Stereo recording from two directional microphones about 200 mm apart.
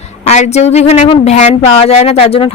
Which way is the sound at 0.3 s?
35° left (ahead or behind).